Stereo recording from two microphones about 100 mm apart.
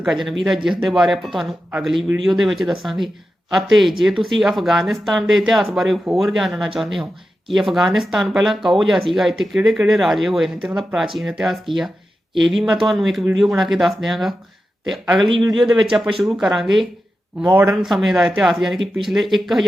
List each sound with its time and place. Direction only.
0.0 s speech: centre (ahead or behind)
17.4 s speech: 20° right (ahead or behind)
17.7 s speech: centre (ahead or behind)